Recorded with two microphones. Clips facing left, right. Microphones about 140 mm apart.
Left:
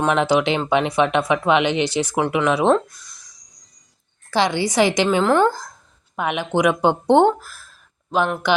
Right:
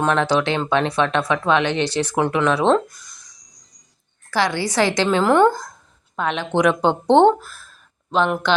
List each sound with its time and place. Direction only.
0.0 s speech: 15° left (ahead or behind)
2.7 s a sound: centre (ahead or behind)
4.3 s a woman's voice: 20° left (ahead or behind)
5.0 s a woman's voice: centre (ahead or behind)
6.1 s speech: 10° left (ahead or behind)